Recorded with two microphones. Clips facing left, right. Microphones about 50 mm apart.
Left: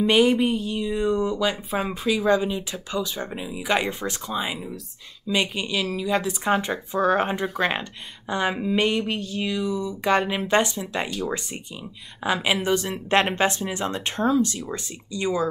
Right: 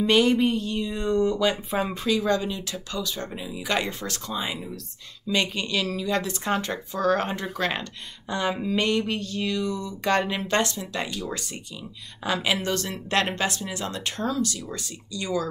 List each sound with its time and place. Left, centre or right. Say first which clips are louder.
0.0 s speech: left 1 dB; centre